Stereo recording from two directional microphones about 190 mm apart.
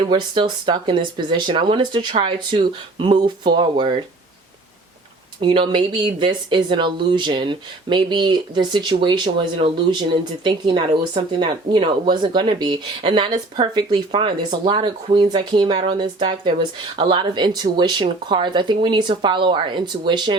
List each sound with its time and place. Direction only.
0.0 s speech: 25° right (ahead or behind)
5.4 s speech: 25° right (ahead or behind)
10.9 s speech: 25° right (ahead or behind)